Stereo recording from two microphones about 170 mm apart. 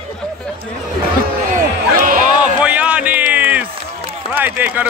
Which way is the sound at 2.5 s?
5° right (ahead or behind).